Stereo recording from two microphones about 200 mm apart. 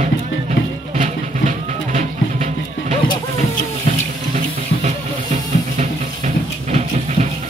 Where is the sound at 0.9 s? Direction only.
35° right (ahead or behind).